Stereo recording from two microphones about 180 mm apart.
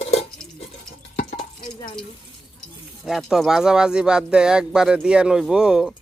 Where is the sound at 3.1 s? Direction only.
Centre (ahead or behind).